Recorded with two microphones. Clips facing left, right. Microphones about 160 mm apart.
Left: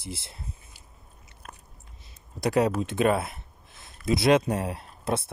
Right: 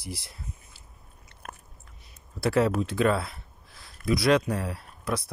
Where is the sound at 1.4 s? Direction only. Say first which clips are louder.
Right 3 dB; 60° right (ahead or behind).